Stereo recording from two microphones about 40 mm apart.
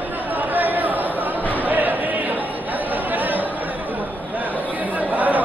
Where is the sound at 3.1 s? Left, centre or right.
Right.